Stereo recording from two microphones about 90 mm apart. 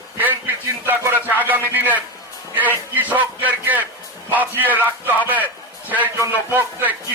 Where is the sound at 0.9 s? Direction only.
20° right (ahead or behind).